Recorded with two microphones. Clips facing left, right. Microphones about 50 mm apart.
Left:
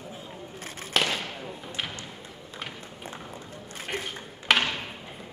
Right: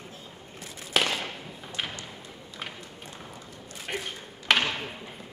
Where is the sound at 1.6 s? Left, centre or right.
Centre.